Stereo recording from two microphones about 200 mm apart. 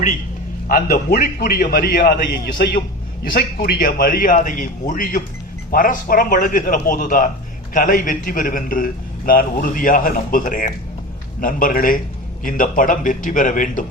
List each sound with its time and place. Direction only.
0.7 s a man's voice: 50° left (ahead or behind)